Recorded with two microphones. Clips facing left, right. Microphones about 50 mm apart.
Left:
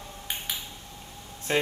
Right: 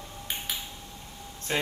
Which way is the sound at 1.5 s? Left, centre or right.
Centre.